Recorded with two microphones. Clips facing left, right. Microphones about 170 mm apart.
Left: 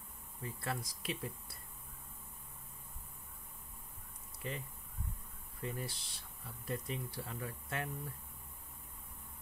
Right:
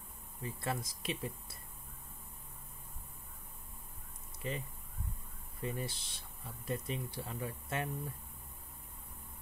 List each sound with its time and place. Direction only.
0.4 s speech: 20° right (ahead or behind)
4.4 s speech: 20° right (ahead or behind)